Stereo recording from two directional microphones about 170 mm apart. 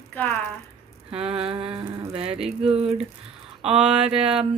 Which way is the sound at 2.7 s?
35° right (ahead or behind).